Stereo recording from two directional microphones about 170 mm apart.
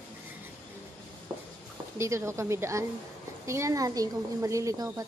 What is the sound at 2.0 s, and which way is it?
A woman's voice, 15° right (ahead or behind).